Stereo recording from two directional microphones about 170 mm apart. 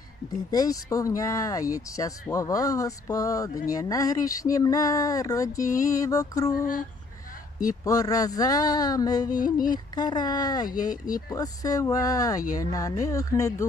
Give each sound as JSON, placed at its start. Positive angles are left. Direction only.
{"t": 0.5, "sound": "speech", "side_deg": 20}
{"t": 7.6, "sound": "speech", "side_deg": 20}
{"t": 9.4, "sound": "speech", "side_deg": 55}
{"t": 9.9, "sound": "speech", "side_deg": 25}
{"t": 10.8, "sound": "speech", "side_deg": 55}
{"t": 11.2, "sound": "speech", "side_deg": 20}